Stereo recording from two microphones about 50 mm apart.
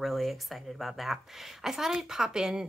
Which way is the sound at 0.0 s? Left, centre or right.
Centre.